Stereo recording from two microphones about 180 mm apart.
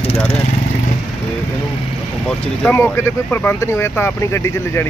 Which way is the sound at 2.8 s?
15° left (ahead or behind).